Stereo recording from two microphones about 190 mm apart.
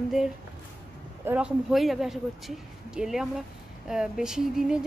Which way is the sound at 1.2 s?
5° right (ahead or behind).